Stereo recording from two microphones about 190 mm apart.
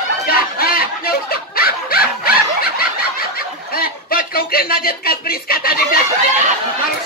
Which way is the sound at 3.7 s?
50° left (ahead or behind).